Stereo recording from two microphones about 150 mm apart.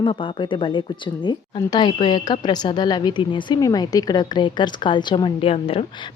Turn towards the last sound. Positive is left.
turn(degrees=40)  # may be behind; listen again after turning